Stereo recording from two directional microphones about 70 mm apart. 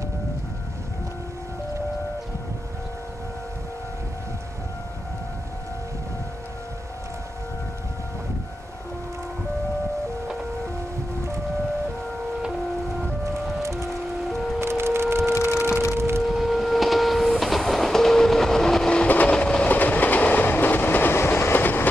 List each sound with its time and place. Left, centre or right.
13.2 s music: right
13.8 s music: centre
14.6 s a sound: right
15.9 s civil defense siren: right
16.2 s train: centre
19.0 s vehicle: left
19.3 s train: centre
19.7 s train: left